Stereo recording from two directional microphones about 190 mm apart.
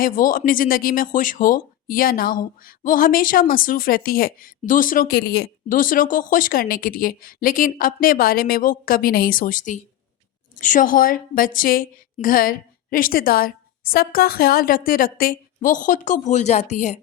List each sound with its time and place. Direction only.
0.0 s speech: 45° left (ahead or behind)